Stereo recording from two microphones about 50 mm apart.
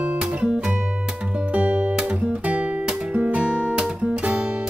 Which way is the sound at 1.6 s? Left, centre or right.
Right.